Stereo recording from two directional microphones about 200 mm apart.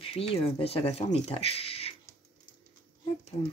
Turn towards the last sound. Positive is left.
turn(degrees=30)  # may be behind; listen again after turning